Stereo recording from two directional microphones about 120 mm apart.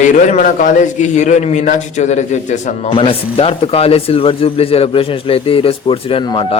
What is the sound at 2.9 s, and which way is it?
A man's voice, 50° left (ahead or behind).